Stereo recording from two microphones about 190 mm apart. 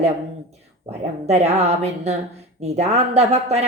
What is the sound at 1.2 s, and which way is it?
Speech, 35° right (ahead or behind).